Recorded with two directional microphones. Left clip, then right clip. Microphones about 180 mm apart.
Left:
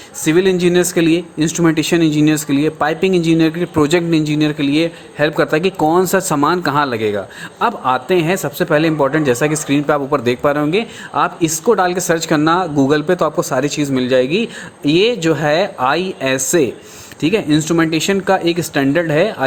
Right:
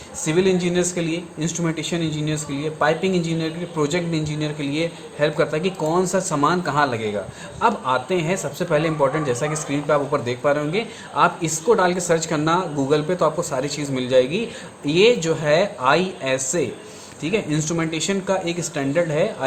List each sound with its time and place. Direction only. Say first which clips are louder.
0.3 s speech: left 7 dB; 50° left (ahead or behind)